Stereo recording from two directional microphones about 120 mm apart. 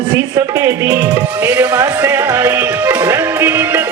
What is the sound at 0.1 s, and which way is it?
Music, 25° right (ahead or behind).